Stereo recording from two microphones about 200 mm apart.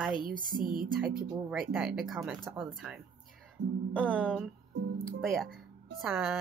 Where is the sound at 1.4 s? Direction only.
5° right (ahead or behind).